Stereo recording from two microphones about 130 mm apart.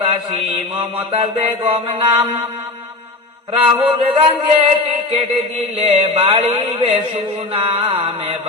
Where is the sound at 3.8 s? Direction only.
50° right (ahead or behind).